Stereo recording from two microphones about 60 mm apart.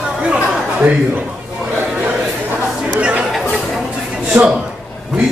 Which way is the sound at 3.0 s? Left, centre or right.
Centre.